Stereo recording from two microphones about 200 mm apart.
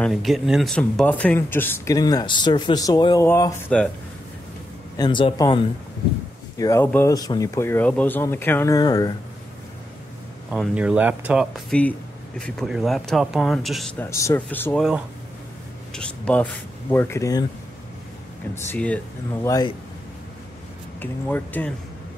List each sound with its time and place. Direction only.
0.0 s speech: centre (ahead or behind)
4.9 s speech: 20° left (ahead or behind)
6.6 s speech: 15° left (ahead or behind)
10.5 s speech: 5° right (ahead or behind)
11.7 s speech: 5° left (ahead or behind)
14.1 s speech: 15° left (ahead or behind)
15.9 s speech: 5° left (ahead or behind)
18.5 s speech: 10° left (ahead or behind)
21.0 s speech: 10° left (ahead or behind)